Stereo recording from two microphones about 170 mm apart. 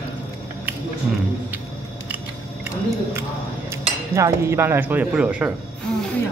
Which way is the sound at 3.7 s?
15° right (ahead or behind).